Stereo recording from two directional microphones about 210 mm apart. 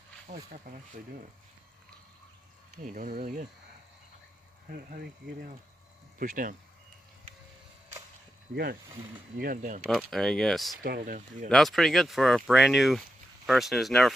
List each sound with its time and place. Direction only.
0.3 s speech: 35° right (ahead or behind)
0.7 s speech: 45° right (ahead or behind)
2.7 s speech: 40° right (ahead or behind)
4.7 s speech: 45° right (ahead or behind)
9.4 s speech: 40° right (ahead or behind)
10.1 s speech: centre (ahead or behind)
10.8 s speech: 45° right (ahead or behind)
11.4 s speech: centre (ahead or behind)